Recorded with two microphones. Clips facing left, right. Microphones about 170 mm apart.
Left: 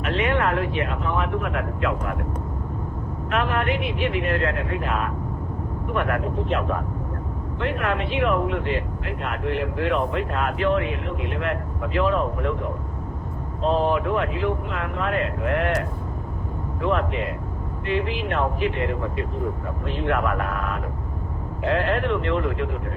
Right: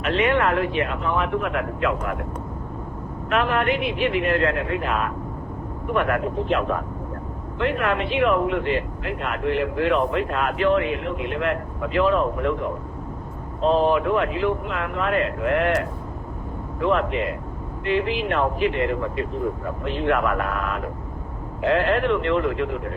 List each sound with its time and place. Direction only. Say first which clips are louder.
0.0 s speech: right 2 dB; 85° right
3.2 s speech: right 2 dB; 90° right
13.7 s speech: right 2 dB; 90° right
16.9 s speech: right 2 dB; 85° right